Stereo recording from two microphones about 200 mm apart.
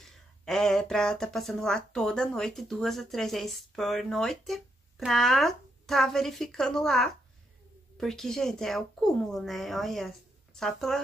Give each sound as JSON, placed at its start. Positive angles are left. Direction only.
{"t": 0.0, "sound": "speech", "side_deg": 0}